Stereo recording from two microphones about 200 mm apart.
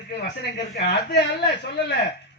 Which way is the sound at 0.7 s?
55° left (ahead or behind).